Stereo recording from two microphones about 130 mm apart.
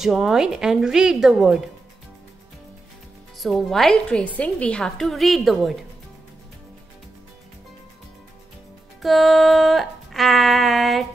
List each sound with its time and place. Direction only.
0.0 s a woman's voice: 5° right (ahead or behind)
3.3 s a woman's voice: centre (ahead or behind)
9.0 s a woman's voice: centre (ahead or behind)